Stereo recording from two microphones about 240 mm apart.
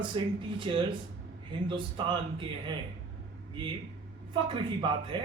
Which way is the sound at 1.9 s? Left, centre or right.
Centre.